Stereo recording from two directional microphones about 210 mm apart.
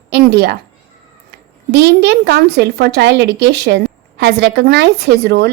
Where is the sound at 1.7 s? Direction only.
55° right (ahead or behind).